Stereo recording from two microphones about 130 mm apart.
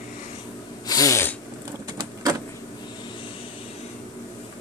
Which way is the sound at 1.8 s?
30° right (ahead or behind).